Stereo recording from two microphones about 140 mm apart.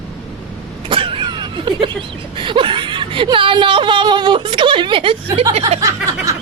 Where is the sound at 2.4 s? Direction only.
35° right (ahead or behind).